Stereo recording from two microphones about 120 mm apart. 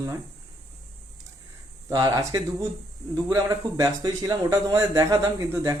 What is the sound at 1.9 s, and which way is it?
Speech, 30° right (ahead or behind).